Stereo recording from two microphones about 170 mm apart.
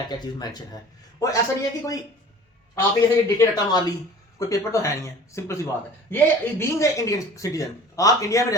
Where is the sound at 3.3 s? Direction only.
25° left (ahead or behind).